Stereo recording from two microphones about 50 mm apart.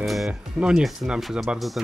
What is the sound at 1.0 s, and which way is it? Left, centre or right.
Speech, right.